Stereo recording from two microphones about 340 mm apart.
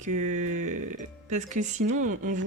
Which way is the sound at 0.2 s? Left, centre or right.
Right.